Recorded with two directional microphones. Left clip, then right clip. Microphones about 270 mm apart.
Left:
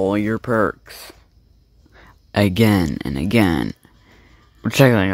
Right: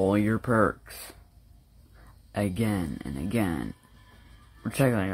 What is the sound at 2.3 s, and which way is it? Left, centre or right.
Speech, left.